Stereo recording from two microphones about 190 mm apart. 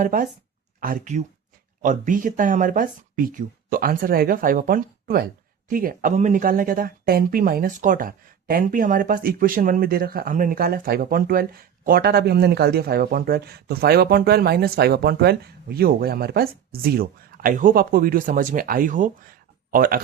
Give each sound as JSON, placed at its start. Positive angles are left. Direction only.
{"t": 0.0, "sound": "speech", "side_deg": -40}